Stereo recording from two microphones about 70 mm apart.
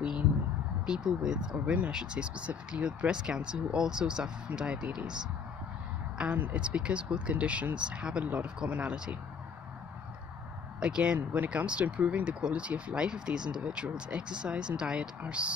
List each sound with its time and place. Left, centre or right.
0.8 s speech: centre
6.1 s speech: right
10.8 s speech: centre
11.1 s speech: right